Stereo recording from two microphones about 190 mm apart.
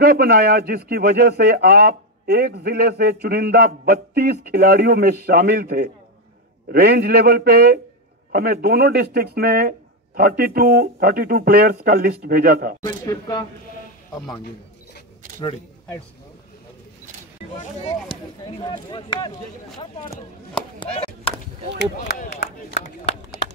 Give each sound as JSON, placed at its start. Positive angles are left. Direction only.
{"t": 0.0, "sound": "speech", "side_deg": -55}
{"t": 12.8, "sound": "speech", "side_deg": 20}
{"t": 17.6, "sound": "speech", "side_deg": 30}
{"t": 20.8, "sound": "chop", "side_deg": 30}
{"t": 21.7, "sound": "speech", "side_deg": 65}
{"t": 22.1, "sound": "speech", "side_deg": 45}